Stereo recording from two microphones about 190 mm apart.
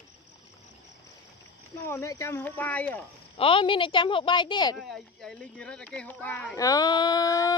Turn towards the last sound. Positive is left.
turn(degrees=20)  # may be behind; listen again after turning